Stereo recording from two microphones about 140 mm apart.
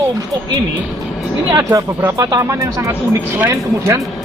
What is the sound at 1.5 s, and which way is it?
Speech, 20° right (ahead or behind).